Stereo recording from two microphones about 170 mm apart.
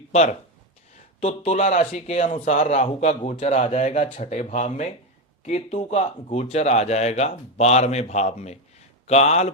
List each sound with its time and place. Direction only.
0.1 s speech: 40° left (ahead or behind)